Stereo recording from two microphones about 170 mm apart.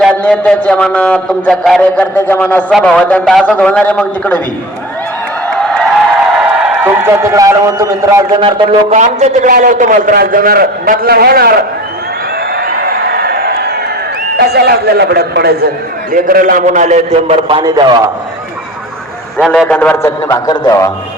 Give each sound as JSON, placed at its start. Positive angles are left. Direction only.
{"t": 0.0, "sound": "a man's voice", "side_deg": 5}
{"t": 5.5, "sound": "a sound", "side_deg": 5}
{"t": 6.7, "sound": "a man's voice", "side_deg": -10}
{"t": 8.9, "sound": "a man's voice", "side_deg": -45}
{"t": 12.5, "sound": "a sound", "side_deg": -65}
{"t": 14.3, "sound": "speech", "side_deg": -70}
{"t": 16.1, "sound": "a man's voice", "side_deg": -55}
{"t": 17.6, "sound": "a man's voice", "side_deg": -25}
{"t": 19.4, "sound": "a man's voice", "side_deg": 5}